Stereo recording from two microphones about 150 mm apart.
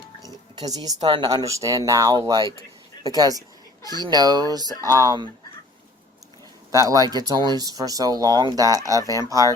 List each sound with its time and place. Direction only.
0.5 s speech: 25° right (ahead or behind)
6.7 s speech: 20° right (ahead or behind)